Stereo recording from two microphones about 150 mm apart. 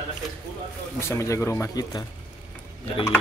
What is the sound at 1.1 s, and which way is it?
Speech, 20° left (ahead or behind).